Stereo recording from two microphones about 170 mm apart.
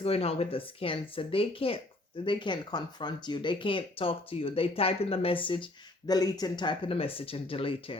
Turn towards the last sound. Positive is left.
turn(degrees=30)  # may be behind; listen again after turning